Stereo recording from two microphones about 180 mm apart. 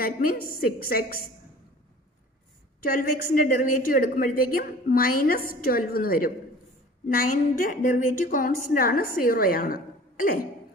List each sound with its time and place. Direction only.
0.0 s a woman's voice: 55° left (ahead or behind)
2.8 s a woman's voice: 55° left (ahead or behind)